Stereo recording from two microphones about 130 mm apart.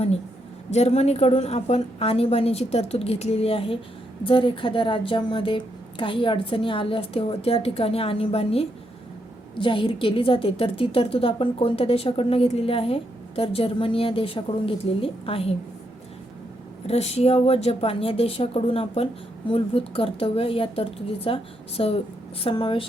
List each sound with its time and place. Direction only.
0.7 s a woman's voice: 55° left (ahead or behind)
16.8 s a woman's voice: 55° left (ahead or behind)